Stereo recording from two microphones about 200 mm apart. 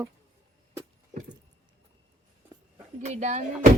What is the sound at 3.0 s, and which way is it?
Speech, 35° right (ahead or behind).